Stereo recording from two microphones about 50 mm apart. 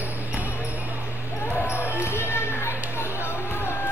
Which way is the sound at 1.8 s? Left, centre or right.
Left.